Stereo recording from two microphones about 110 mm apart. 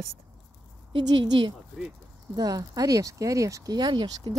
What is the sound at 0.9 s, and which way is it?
Speech, 45° right (ahead or behind).